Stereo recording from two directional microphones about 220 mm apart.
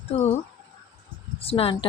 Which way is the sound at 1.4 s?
25° left (ahead or behind).